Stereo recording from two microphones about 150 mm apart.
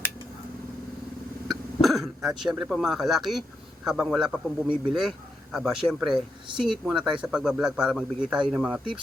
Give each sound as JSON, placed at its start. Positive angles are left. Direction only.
{"t": 1.5, "sound": "throat clearing", "side_deg": 0}
{"t": 2.4, "sound": "a man's voice", "side_deg": -5}